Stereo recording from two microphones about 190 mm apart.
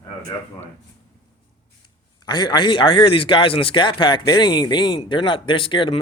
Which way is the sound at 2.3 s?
25° left (ahead or behind).